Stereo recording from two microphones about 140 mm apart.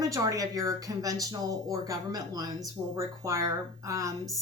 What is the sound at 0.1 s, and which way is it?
A woman's voice, 25° right (ahead or behind).